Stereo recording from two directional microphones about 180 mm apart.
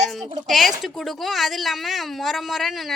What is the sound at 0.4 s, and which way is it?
A woman's voice, centre (ahead or behind).